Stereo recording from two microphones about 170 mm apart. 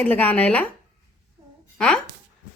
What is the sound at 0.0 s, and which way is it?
Speech, 10° left (ahead or behind).